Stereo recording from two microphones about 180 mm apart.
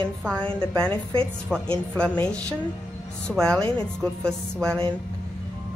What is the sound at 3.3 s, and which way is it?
Speech, 5° left (ahead or behind).